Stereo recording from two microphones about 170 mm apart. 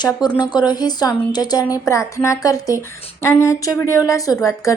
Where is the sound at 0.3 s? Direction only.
25° left (ahead or behind).